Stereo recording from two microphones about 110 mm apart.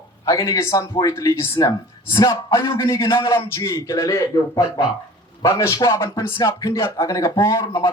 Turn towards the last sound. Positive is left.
turn(degrees=30)  # may be behind; listen again after turning